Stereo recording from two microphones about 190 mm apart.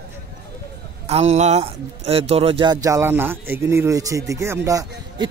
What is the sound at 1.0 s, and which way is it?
Speech, 35° right (ahead or behind).